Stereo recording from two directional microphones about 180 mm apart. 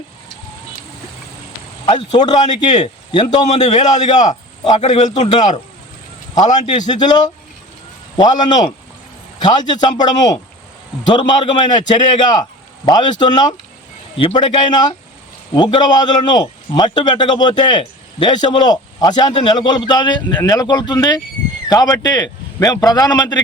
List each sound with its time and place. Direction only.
2.1 s a man's voice: 25° left (ahead or behind)
2.4 s a man's voice: 40° left (ahead or behind)
3.1 s a man's voice: 25° left (ahead or behind)
3.4 s a man's voice: 40° left (ahead or behind)
6.7 s a man's voice: 25° left (ahead or behind)